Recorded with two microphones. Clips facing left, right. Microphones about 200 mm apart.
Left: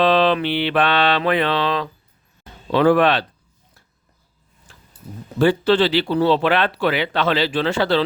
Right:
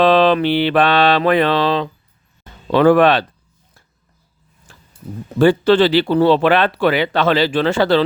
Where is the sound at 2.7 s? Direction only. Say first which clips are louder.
Right 4 dB; 55° right (ahead or behind).